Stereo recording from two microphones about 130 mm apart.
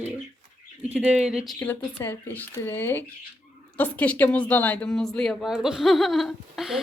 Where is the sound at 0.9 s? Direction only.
5° right (ahead or behind).